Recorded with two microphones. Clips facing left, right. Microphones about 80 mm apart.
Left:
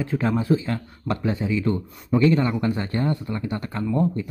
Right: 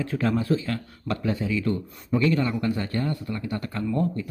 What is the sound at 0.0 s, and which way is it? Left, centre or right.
A man's voice, centre.